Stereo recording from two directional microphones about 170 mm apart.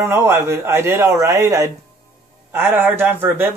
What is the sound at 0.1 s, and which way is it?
Speech, 15° right (ahead or behind).